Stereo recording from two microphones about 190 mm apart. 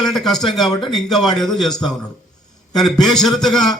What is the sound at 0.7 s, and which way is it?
Speech, 25° left (ahead or behind).